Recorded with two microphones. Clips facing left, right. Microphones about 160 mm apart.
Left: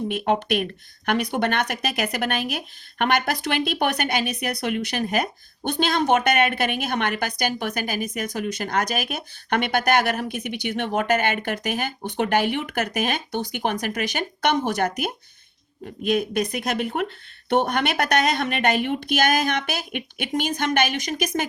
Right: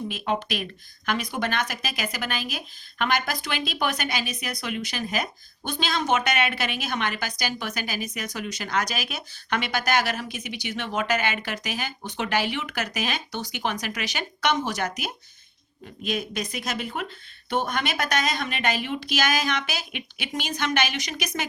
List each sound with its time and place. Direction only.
0.1 s speech: 60° left (ahead or behind)